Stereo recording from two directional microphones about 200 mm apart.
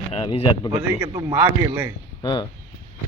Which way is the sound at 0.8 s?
10° right (ahead or behind).